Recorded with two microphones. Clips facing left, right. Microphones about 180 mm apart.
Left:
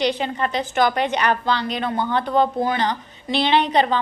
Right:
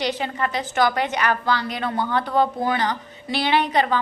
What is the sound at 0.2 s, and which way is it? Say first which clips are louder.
A woman's voice: left 2 dB; 25° left (ahead or behind).